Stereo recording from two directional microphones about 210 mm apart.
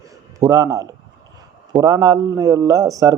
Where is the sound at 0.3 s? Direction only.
15° right (ahead or behind).